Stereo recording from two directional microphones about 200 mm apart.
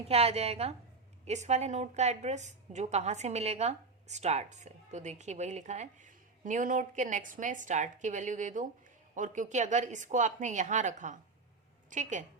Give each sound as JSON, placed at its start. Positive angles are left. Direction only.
{"t": 0.1, "sound": "a woman's voice", "side_deg": -30}